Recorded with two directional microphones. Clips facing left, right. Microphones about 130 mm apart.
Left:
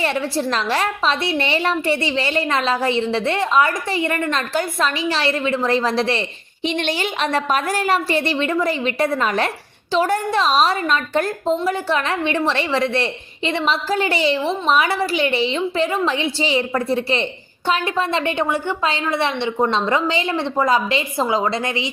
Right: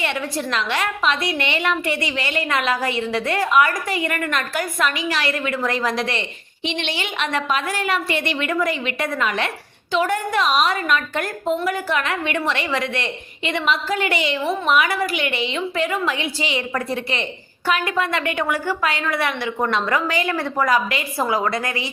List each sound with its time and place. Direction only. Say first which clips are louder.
0.0 s a woman's voice: left 4 dB; 35° left (ahead or behind)
6.7 s a woman's voice: left 4 dB; 45° left (ahead or behind); by 21.8 s 25° left (ahead or behind)